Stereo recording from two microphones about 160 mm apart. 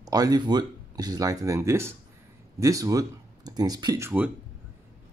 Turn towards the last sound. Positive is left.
turn(degrees=-15)  # may be behind; listen again after turning